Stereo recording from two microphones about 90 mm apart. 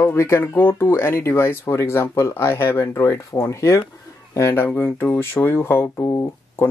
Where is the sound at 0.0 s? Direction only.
30° left (ahead or behind).